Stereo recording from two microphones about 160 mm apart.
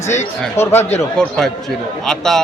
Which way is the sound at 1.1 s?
5° left (ahead or behind).